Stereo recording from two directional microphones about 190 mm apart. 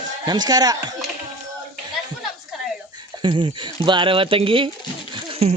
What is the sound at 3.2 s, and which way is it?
Speech, 25° right (ahead or behind).